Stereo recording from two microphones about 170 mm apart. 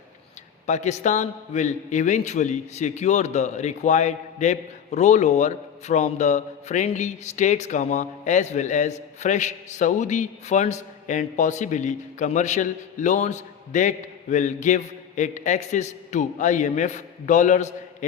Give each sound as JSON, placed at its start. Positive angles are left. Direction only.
{"t": 0.7, "sound": "a man's voice", "side_deg": 45}